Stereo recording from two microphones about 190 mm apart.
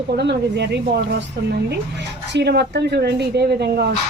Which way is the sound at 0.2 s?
65° right (ahead or behind).